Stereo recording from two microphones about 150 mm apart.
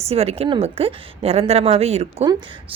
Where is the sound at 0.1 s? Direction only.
45° right (ahead or behind).